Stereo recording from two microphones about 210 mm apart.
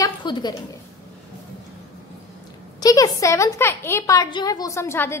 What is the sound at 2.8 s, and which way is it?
A woman's voice, 15° left (ahead or behind).